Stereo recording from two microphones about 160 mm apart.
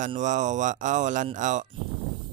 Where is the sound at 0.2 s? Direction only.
50° right (ahead or behind).